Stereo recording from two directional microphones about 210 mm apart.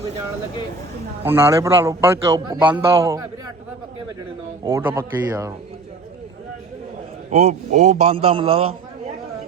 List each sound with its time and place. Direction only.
1.2 s a man's voice: 10° right (ahead or behind)
4.6 s a man's voice: 15° right (ahead or behind)
7.3 s a man's voice: 35° right (ahead or behind)